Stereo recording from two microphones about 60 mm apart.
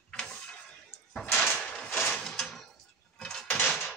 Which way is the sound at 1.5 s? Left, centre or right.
Centre.